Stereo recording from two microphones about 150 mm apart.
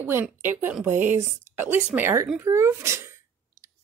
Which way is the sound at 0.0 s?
15° right (ahead or behind).